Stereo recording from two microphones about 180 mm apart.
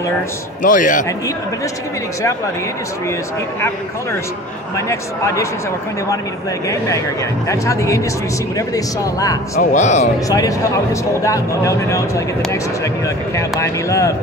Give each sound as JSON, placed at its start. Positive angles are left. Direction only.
{"t": 0.6, "sound": "a man's voice", "side_deg": 45}
{"t": 4.7, "sound": "speech", "side_deg": 15}
{"t": 7.4, "sound": "speech", "side_deg": 15}
{"t": 9.6, "sound": "a man's voice", "side_deg": 40}
{"t": 10.2, "sound": "speech", "side_deg": 20}